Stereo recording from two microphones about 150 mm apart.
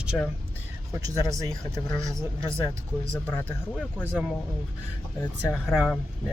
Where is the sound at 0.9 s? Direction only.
20° right (ahead or behind).